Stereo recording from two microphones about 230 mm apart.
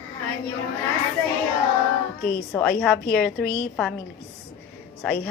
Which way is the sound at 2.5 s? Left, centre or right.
Centre.